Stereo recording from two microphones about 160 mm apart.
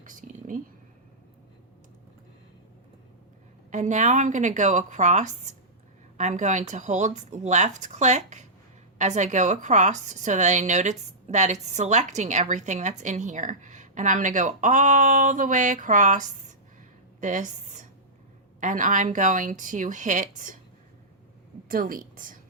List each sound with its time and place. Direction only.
0.0 s a sound: 55° right (ahead or behind)
3.7 s a woman's voice: 50° right (ahead or behind)
21.7 s a woman's voice: 60° right (ahead or behind)